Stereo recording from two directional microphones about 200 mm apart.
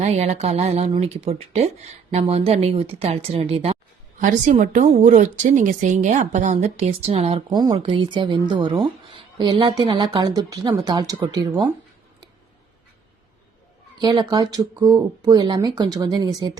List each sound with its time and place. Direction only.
0.0 s speech: 35° right (ahead or behind)
14.0 s speech: 20° right (ahead or behind)